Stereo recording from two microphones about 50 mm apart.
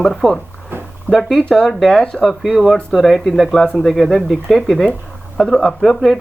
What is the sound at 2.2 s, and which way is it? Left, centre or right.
Speech, centre.